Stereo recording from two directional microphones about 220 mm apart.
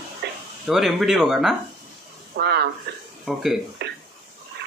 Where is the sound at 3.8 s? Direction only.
50° right (ahead or behind).